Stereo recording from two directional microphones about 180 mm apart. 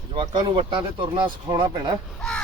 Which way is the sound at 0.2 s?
25° right (ahead or behind).